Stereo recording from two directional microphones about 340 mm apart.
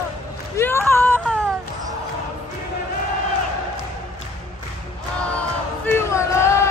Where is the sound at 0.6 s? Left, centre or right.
Centre.